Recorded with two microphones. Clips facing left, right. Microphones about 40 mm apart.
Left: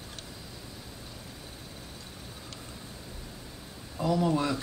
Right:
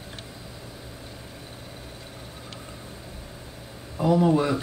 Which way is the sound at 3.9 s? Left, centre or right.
Right.